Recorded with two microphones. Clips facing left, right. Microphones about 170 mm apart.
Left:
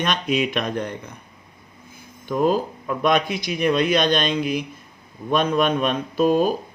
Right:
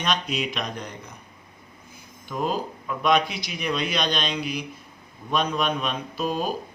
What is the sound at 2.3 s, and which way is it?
Speech, 50° left (ahead or behind).